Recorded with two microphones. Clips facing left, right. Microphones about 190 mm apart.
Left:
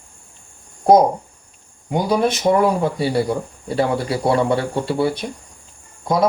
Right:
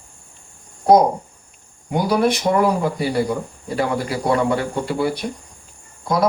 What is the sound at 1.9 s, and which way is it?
Speech, 25° left (ahead or behind).